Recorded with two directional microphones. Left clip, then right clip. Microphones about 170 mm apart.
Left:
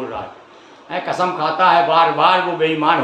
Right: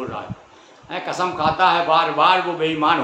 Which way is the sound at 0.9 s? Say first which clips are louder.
Left 4 dB; 20° right (ahead or behind).